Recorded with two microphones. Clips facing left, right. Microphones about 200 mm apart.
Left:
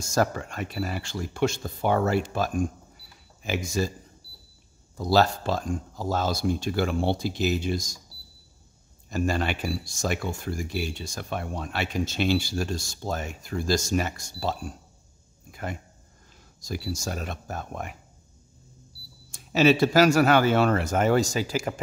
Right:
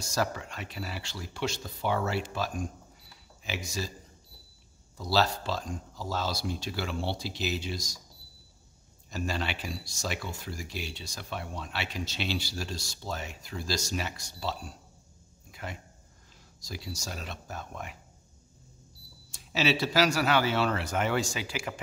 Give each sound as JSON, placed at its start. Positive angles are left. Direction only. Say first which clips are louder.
{"t": 0.0, "sound": "speech", "louder": "left 6 dB", "side_deg": 50}
{"t": 4.9, "sound": "speech", "louder": "left 6 dB", "side_deg": 50}
{"t": 9.1, "sound": "speech", "louder": "left 7 dB", "side_deg": 50}
{"t": 15.5, "sound": "a sound", "louder": "left 6 dB", "side_deg": 50}
{"t": 16.6, "sound": "speech", "louder": "left 8 dB", "side_deg": 50}
{"t": 19.3, "sound": "speech", "louder": "left 8 dB", "side_deg": 50}